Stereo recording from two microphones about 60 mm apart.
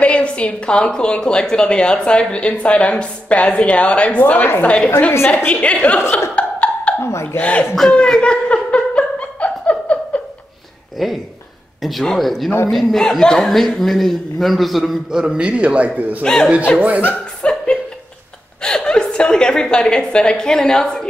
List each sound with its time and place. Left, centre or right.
0.0 s a woman's voice: centre
4.2 s a woman's voice: left
4.6 s a woman's voice: left
6.3 s a sound: left
7.0 s hiccup: left
7.3 s a woman's voice: left
7.9 s laughter: centre
11.0 s a man's voice: centre
15.1 s a man's voice: centre
16.2 s a woman's voice: centre
17.4 s chuckle: centre
19.1 s a woman's voice: centre